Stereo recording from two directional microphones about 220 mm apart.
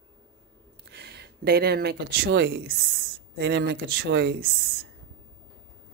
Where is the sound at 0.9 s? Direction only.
50° right (ahead or behind).